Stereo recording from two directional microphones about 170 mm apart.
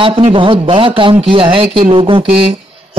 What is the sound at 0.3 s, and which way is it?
A man's voice, 30° right (ahead or behind).